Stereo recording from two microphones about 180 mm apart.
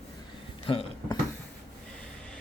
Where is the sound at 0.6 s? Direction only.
30° left (ahead or behind).